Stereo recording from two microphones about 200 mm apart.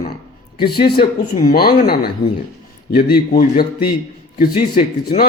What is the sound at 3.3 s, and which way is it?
Speech, 45° left (ahead or behind).